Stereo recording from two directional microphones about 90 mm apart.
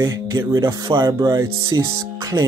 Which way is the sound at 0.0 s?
45° right (ahead or behind).